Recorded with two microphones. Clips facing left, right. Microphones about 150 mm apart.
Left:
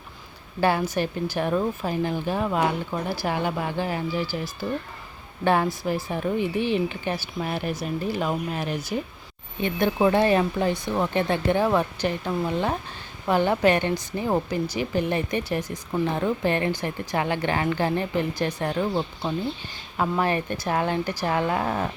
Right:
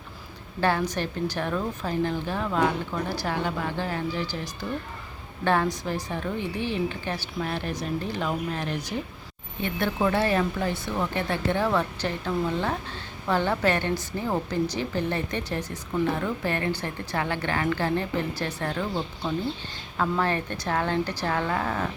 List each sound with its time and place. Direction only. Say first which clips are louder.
0.6 s a woman's voice: left 2 dB; 10° left (ahead or behind)
6.1 s a woman's voice: left 5 dB; 15° left (ahead or behind)